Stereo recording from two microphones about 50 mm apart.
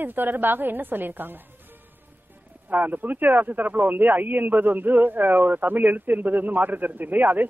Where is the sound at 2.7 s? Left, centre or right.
Right.